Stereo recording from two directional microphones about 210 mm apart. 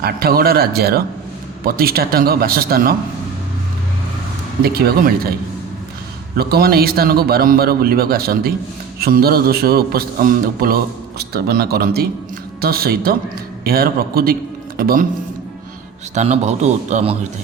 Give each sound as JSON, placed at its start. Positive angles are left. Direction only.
{"t": 0.0, "sound": "speech", "side_deg": -45}
{"t": 4.6, "sound": "speech", "side_deg": -45}
{"t": 6.3, "sound": "speech", "side_deg": -50}
{"t": 16.1, "sound": "speech", "side_deg": -30}